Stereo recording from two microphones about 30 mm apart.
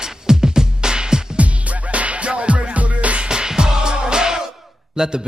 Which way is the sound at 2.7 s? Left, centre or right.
Right.